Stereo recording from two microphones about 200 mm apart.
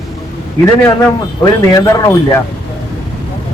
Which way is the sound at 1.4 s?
20° left (ahead or behind).